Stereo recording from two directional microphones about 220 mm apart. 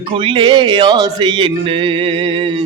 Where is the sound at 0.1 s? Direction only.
25° right (ahead or behind).